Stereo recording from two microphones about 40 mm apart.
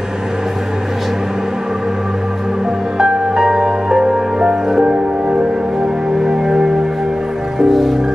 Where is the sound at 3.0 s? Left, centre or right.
Centre.